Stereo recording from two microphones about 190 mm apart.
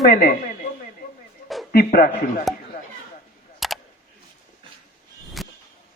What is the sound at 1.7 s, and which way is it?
Speech, 50° left (ahead or behind).